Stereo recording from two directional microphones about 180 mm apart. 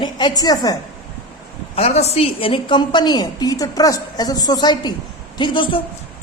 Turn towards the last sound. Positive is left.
turn(degrees=25)  # may be behind; listen again after turning